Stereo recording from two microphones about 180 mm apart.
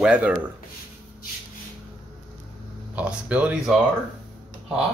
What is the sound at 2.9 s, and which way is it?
Speech, 10° right (ahead or behind).